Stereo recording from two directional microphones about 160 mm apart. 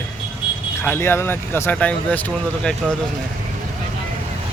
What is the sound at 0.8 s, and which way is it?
Speech, 15° left (ahead or behind).